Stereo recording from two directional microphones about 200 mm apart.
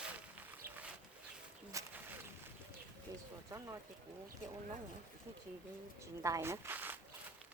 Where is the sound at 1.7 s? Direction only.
10° right (ahead or behind).